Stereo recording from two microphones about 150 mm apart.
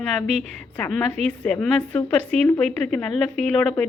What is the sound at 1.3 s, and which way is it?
A woman's voice, 5° left (ahead or behind).